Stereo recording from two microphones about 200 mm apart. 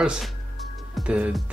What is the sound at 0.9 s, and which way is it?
Music, centre (ahead or behind).